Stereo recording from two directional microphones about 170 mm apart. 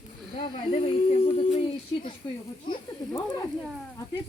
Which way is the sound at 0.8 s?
40° left (ahead or behind).